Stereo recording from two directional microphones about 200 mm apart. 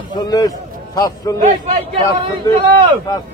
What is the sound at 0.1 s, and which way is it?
Speech, 20° left (ahead or behind).